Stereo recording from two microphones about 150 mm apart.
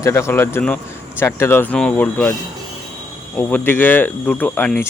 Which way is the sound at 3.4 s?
10° left (ahead or behind).